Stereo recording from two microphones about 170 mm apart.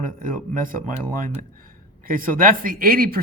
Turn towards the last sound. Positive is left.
turn(degrees=-60)  # may be behind; listen again after turning